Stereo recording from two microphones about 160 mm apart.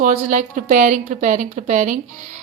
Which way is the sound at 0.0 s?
50° right (ahead or behind).